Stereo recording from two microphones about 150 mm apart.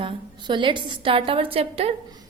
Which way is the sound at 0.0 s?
30° right (ahead or behind).